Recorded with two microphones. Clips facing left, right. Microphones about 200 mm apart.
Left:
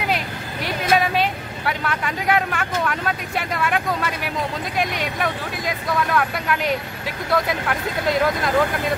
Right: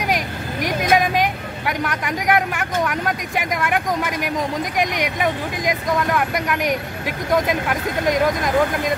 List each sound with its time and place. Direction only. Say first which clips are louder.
0.0 s vehicle: right 2 dB; 15° right (ahead or behind)
4.7 s speech: right 1 dB; 15° right (ahead or behind)